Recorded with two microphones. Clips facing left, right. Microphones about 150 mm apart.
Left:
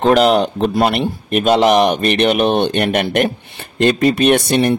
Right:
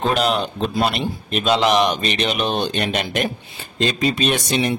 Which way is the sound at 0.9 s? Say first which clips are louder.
Left 6 dB; 55° left (ahead or behind).